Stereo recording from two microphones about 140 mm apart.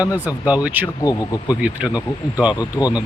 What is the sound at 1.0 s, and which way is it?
Speech, 30° left (ahead or behind).